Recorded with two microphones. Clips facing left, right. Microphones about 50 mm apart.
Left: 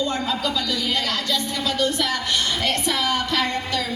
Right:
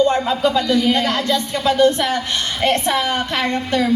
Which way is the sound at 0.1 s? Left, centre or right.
Right.